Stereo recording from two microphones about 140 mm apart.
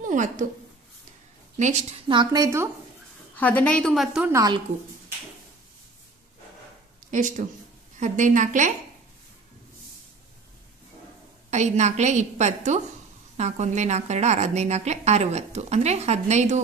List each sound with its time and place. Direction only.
0.0 s a woman's voice: 65° right (ahead or behind)
1.6 s a woman's voice: 55° right (ahead or behind)
2.0 s speech: 30° right (ahead or behind)
3.3 s a woman's voice: 10° left (ahead or behind)
4.3 s speech: 25° right (ahead or behind)
7.1 s a woman's voice: 65° right (ahead or behind)
11.5 s a woman's voice: 55° right (ahead or behind)